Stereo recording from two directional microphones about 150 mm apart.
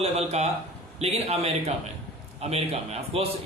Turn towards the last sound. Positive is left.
turn(degrees=-40)  # may be behind; listen again after turning